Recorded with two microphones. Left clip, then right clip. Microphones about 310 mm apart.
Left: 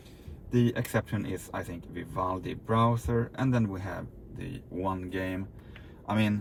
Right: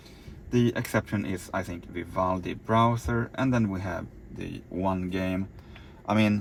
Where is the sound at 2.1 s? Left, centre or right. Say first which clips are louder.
Right 4 dB; right.